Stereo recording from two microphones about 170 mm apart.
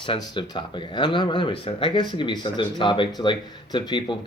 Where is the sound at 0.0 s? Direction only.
30° left (ahead or behind).